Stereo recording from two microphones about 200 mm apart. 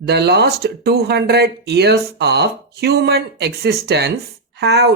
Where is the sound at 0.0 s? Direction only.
55° right (ahead or behind).